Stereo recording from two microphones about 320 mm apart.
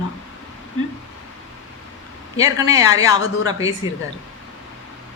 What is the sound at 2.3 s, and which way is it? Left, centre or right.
Speech, centre.